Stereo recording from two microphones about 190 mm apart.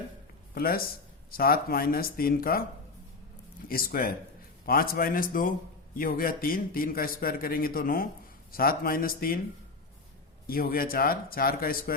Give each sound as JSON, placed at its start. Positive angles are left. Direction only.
{"t": 0.5, "sound": "a man's voice", "side_deg": 50}
{"t": 3.7, "sound": "a man's voice", "side_deg": 50}
{"t": 10.4, "sound": "a man's voice", "side_deg": 50}